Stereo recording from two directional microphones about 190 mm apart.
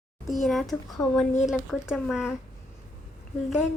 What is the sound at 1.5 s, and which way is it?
Speech, centre (ahead or behind).